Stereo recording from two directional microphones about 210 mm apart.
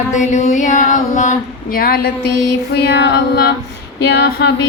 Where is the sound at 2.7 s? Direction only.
55° left (ahead or behind).